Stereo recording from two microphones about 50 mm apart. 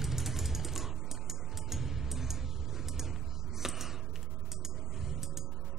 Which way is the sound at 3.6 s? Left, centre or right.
Centre.